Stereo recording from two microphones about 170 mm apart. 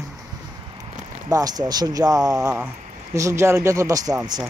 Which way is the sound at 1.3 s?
20° right (ahead or behind).